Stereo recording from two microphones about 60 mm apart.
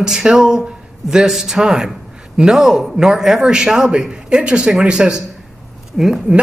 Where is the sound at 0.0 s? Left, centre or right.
Centre.